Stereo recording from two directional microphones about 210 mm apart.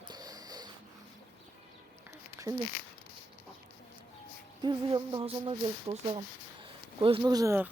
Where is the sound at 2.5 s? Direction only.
15° right (ahead or behind).